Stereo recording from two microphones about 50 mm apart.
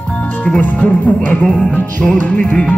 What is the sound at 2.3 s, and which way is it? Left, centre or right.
Music, centre.